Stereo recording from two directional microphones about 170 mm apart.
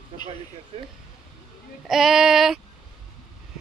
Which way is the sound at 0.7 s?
35° right (ahead or behind).